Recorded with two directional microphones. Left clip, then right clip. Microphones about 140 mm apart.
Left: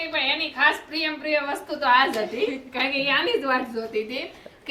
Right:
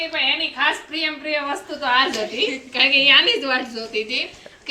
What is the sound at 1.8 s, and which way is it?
A woman's voice, 30° left (ahead or behind).